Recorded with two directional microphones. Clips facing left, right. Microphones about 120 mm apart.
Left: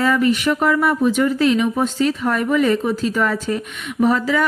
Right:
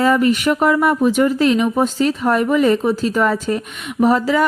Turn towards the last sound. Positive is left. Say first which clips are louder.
# right 2 dB
turn(degrees=-35)  # may be behind; listen again after turning